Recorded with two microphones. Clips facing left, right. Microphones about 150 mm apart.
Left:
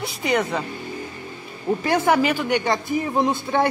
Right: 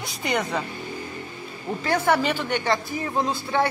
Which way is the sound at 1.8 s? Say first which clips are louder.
Left 2 dB; 15° left (ahead or behind).